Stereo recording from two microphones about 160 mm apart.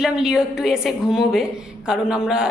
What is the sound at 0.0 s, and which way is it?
Speech, 5° right (ahead or behind).